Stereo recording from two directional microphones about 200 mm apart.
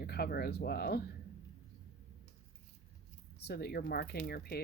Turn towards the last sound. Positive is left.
turn(degrees=50)  # may be behind; listen again after turning